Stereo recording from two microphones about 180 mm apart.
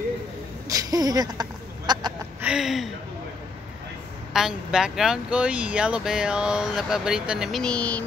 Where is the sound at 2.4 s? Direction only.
5° right (ahead or behind).